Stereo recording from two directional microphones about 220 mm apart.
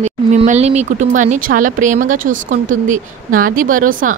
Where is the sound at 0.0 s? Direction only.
30° right (ahead or behind).